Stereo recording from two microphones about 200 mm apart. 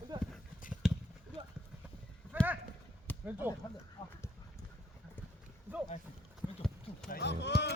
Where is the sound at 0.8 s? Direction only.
Centre (ahead or behind).